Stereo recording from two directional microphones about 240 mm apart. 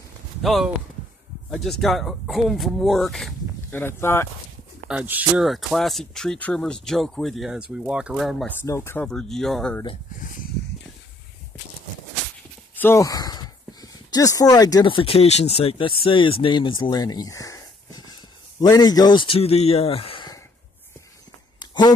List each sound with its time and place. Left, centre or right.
0.4 s speech: centre
4.8 s speech: centre
8.6 s speech: centre
12.7 s speech: centre
21.5 s a sound: centre